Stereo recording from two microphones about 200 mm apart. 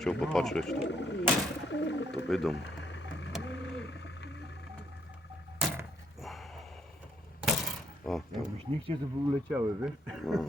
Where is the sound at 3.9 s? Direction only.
60° left (ahead or behind).